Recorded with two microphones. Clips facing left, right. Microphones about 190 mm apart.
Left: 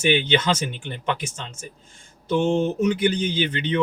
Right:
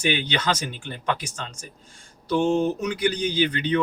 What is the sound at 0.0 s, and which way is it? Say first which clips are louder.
Speech: left 4 dB; 25° left (ahead or behind).